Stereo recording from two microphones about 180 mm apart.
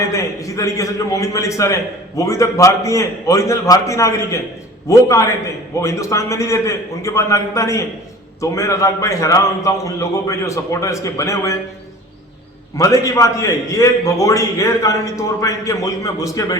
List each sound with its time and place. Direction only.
0.1 s a man's voice: 15° left (ahead or behind)
12.7 s a man's voice: 20° left (ahead or behind)